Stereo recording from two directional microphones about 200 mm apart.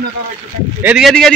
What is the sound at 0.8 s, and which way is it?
Speech, 5° right (ahead or behind).